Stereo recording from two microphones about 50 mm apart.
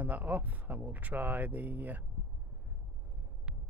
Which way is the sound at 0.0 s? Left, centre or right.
Right.